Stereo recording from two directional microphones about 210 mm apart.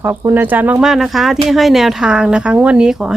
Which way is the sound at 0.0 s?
10° right (ahead or behind).